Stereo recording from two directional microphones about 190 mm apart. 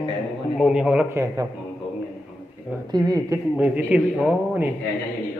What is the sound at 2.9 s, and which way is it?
Speech, 20° right (ahead or behind).